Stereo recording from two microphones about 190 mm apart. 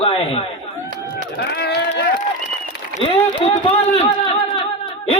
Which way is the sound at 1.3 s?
60° left (ahead or behind).